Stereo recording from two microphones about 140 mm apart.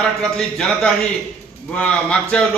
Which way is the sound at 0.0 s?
5° left (ahead or behind).